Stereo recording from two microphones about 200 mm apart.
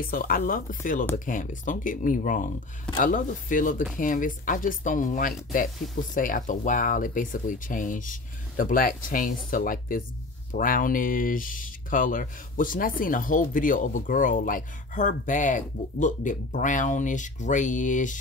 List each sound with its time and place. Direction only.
0.0 s speech: 45° left (ahead or behind)